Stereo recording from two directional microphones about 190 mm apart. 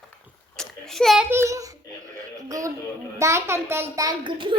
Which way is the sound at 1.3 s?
15° right (ahead or behind).